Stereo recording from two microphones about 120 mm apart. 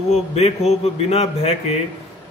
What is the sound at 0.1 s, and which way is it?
A man's voice, 65° left (ahead or behind).